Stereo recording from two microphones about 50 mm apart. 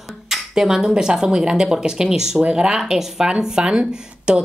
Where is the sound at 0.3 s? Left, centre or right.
Centre.